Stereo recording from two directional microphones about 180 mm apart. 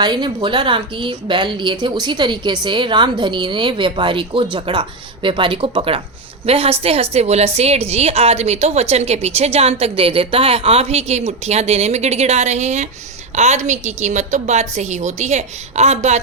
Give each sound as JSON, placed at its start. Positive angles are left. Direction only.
{"t": 0.0, "sound": "a woman's voice", "side_deg": -25}